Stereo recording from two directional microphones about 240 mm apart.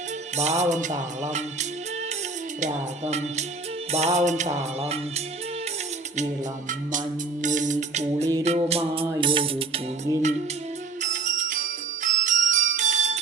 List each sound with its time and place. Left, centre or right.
0.3 s music: right
2.6 s music: right
7.4 s music: right